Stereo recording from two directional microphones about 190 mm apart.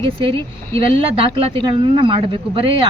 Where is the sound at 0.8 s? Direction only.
25° right (ahead or behind).